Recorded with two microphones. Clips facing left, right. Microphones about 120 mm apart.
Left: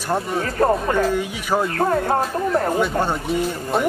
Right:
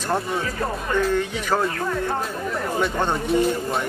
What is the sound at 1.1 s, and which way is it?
Speech, 10° left (ahead or behind).